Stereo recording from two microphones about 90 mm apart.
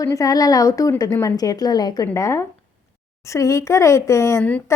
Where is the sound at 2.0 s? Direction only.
30° left (ahead or behind).